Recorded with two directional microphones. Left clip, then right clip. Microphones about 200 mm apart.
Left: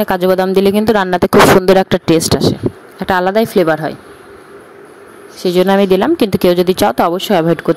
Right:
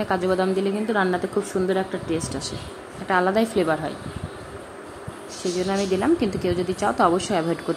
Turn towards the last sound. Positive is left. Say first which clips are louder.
# left 10 dB
turn(degrees=40)  # may be behind; listen again after turning